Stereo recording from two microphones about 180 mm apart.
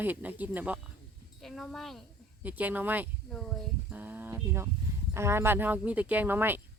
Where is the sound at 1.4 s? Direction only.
Centre (ahead or behind).